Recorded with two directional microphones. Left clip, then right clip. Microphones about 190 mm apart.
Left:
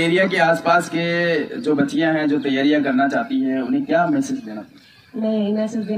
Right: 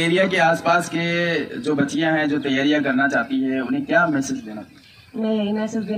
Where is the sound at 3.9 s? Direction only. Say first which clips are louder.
Right 1 dB; 25° right (ahead or behind).